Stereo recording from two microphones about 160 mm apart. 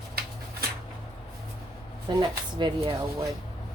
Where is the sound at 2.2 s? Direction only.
30° right (ahead or behind).